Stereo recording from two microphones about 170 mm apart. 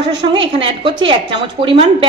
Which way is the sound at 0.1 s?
30° right (ahead or behind).